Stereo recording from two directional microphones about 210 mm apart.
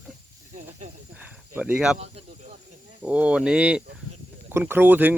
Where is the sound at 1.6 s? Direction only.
5° right (ahead or behind).